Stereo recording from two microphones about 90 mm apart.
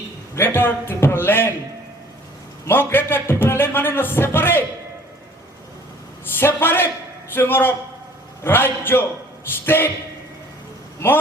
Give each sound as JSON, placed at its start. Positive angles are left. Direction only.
{"t": 0.3, "sound": "a man's voice", "side_deg": 25}
{"t": 2.6, "sound": "a man's voice", "side_deg": 25}
{"t": 6.3, "sound": "a man's voice", "side_deg": 25}